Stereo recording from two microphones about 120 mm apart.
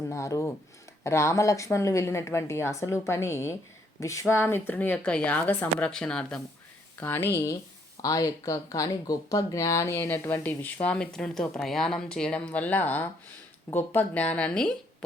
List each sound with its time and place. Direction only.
0.1 s speech: 25° left (ahead or behind); by 6.4 s 5° left (ahead or behind)
7.0 s speech: 15° left (ahead or behind)